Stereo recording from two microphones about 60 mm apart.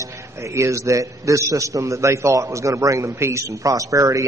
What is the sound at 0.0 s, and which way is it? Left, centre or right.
A man's voice, right.